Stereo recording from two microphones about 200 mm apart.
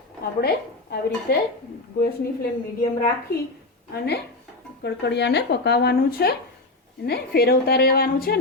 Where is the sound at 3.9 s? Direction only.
55° left (ahead or behind).